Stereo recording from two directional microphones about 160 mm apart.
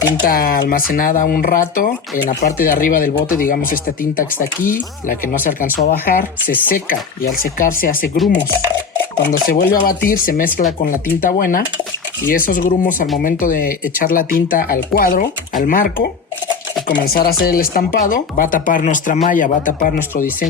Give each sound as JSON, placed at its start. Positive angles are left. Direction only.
{"t": 0.0, "sound": "speech", "side_deg": 70}
{"t": 6.7, "sound": "speech", "side_deg": 60}
{"t": 9.5, "sound": "speech", "side_deg": 65}